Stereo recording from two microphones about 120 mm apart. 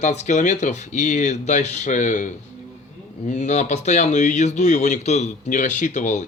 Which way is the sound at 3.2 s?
75° left (ahead or behind).